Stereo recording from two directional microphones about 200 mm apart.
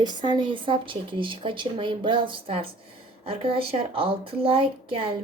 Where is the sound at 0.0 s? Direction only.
20° right (ahead or behind).